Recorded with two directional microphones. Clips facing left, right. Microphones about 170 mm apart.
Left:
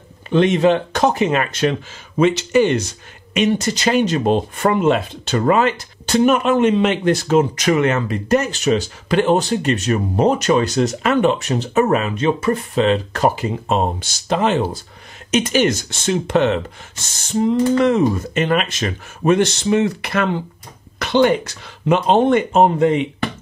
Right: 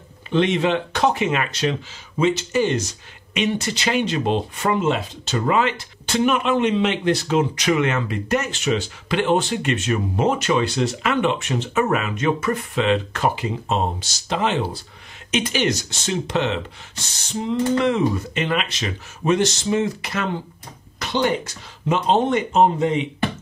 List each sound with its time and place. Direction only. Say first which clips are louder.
0.3 s speech: left 5 dB; 45° left (ahead or behind); by 2.9 s 65° left (ahead or behind)
3.3 s speech: left 5 dB; 40° left (ahead or behind)
13.7 s speech: left 4 dB; 50° left (ahead or behind)